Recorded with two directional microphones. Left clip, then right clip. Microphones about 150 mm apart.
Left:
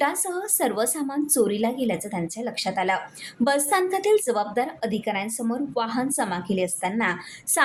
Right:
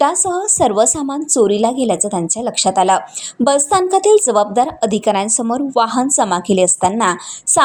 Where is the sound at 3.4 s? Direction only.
40° right (ahead or behind); by 7.2 s 55° right (ahead or behind).